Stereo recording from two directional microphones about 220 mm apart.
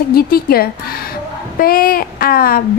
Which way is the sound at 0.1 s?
45° left (ahead or behind).